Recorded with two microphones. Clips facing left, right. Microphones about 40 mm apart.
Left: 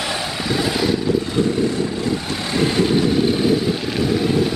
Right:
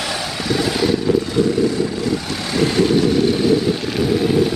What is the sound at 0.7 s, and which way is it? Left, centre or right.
Vehicle, centre.